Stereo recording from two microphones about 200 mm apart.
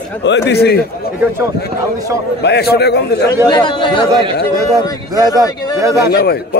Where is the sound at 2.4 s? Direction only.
55° left (ahead or behind).